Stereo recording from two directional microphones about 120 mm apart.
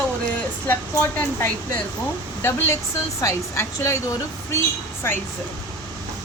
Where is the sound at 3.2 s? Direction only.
25° left (ahead or behind).